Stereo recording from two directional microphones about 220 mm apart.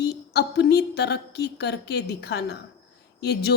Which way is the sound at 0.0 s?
50° left (ahead or behind).